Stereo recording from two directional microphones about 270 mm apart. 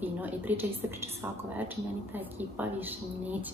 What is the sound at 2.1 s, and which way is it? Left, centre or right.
A woman's voice, centre.